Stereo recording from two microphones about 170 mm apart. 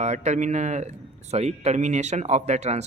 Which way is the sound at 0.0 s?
40° right (ahead or behind).